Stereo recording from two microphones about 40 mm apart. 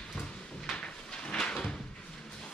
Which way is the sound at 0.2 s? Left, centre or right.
Left.